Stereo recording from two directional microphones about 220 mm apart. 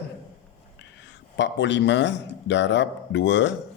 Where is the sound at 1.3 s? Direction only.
55° left (ahead or behind).